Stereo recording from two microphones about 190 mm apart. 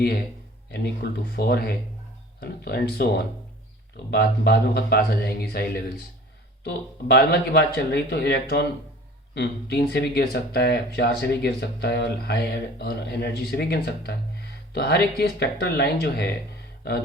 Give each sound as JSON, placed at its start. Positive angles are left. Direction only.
{"t": 1.4, "sound": "speech", "side_deg": 55}
{"t": 7.1, "sound": "speech", "side_deg": 55}